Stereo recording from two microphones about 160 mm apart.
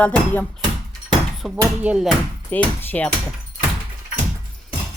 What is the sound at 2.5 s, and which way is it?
Speech, 10° left (ahead or behind).